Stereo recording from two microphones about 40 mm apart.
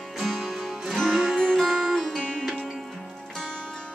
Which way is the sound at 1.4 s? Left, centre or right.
Centre.